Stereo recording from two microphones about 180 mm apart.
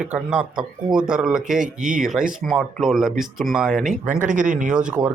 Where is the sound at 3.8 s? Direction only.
45° right (ahead or behind).